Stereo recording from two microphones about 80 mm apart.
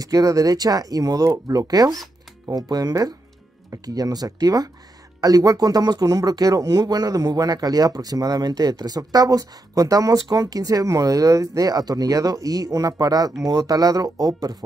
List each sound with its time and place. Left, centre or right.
0.0 s speech: right